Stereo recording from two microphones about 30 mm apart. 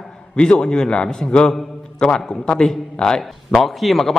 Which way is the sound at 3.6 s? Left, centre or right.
Centre.